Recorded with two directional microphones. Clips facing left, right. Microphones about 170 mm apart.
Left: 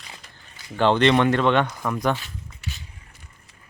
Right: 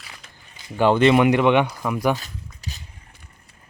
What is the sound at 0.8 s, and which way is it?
Speech, 5° right (ahead or behind).